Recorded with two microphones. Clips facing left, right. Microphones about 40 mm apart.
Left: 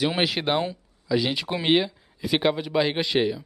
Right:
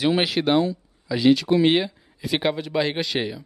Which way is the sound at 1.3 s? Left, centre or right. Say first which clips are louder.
Right 10 dB; centre.